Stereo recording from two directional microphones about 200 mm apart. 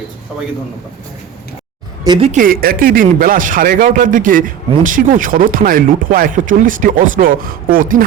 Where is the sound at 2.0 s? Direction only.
20° right (ahead or behind).